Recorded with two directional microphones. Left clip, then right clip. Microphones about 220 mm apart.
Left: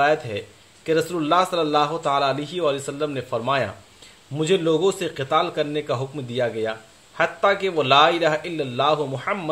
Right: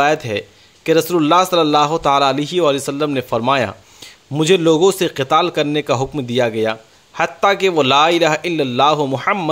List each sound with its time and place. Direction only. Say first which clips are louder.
0.0 s a man's voice: right 4 dB; 45° right (ahead or behind)